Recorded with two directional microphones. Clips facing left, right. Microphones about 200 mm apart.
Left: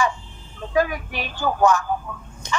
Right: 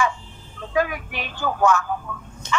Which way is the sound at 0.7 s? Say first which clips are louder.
Left 2 dB; 35° left (ahead or behind).